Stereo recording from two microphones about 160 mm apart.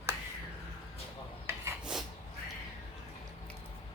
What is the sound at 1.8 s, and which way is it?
Cat, 5° right (ahead or behind).